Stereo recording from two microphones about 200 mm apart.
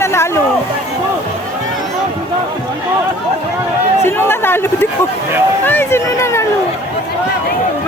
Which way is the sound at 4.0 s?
10° left (ahead or behind).